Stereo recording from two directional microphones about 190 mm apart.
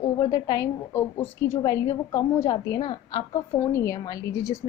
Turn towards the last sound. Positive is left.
turn(degrees=15)  # may be behind; listen again after turning